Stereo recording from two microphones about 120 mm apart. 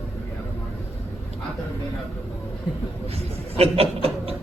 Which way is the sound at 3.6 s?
55° right (ahead or behind).